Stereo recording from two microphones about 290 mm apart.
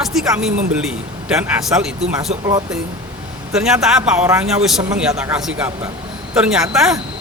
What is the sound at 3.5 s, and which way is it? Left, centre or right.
Speech, centre.